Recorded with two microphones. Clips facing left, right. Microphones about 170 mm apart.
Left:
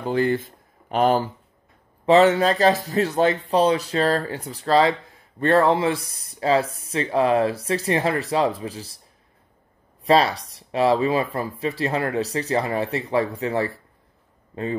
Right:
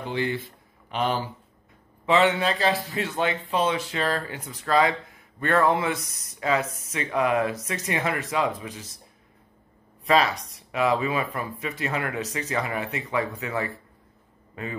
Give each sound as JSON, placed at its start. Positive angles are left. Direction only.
{"t": 0.0, "sound": "speech", "side_deg": 45}
{"t": 10.0, "sound": "speech", "side_deg": 35}